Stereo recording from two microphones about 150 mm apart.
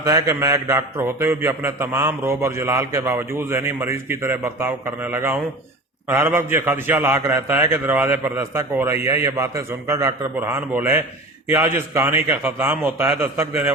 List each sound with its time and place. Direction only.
0.0 s a man's voice: 20° right (ahead or behind)